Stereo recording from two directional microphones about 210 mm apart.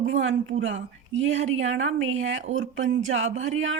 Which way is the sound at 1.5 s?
65° right (ahead or behind).